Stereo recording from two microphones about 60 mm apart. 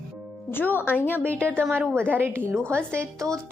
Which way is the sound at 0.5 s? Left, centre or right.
Left.